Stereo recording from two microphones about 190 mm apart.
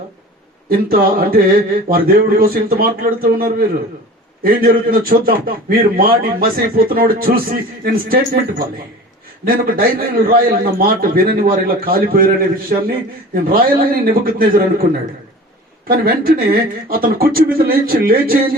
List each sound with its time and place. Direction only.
0.7 s a man's voice: 50° right (ahead or behind)
15.9 s a man's voice: 50° right (ahead or behind)